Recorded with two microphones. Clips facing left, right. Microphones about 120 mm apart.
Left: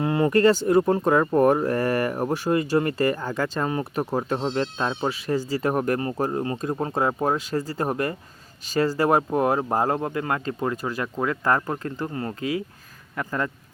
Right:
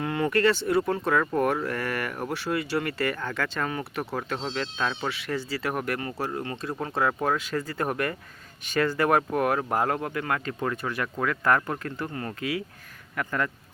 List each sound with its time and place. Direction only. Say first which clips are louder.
0.0 s speech: left 5 dB; 30° left (ahead or behind)
5.0 s speech: left 5 dB; 40° left (ahead or behind); by 7.3 s 20° left (ahead or behind)
7.3 s speech: left 3 dB; 35° left (ahead or behind)